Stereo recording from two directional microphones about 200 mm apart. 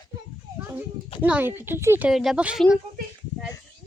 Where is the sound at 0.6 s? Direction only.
10° right (ahead or behind).